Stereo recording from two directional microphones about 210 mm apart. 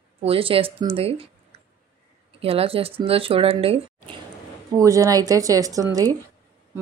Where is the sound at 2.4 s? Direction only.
25° right (ahead or behind).